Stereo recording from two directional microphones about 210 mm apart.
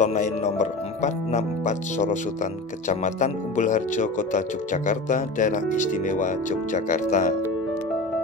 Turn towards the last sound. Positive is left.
turn(degrees=35)  # may be behind; listen again after turning